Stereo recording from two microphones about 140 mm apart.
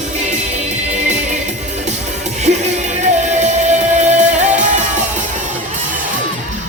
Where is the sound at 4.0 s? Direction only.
60° right (ahead or behind).